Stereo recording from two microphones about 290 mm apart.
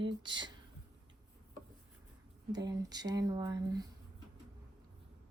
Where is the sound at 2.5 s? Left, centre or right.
Centre.